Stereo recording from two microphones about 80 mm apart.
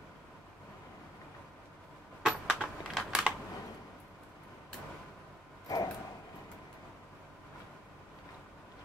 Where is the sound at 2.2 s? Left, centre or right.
Centre.